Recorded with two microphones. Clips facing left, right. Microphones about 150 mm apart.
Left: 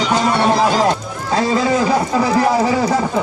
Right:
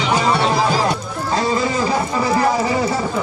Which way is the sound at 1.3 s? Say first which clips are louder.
Left 3 dB; 90° left.